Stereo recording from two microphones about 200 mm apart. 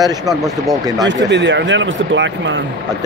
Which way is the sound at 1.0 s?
65° right (ahead or behind).